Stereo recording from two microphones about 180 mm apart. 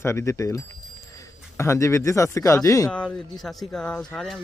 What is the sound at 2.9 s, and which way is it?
Speech, 5° left (ahead or behind).